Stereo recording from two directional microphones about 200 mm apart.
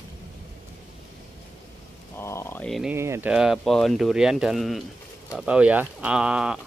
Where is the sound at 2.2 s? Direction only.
15° left (ahead or behind).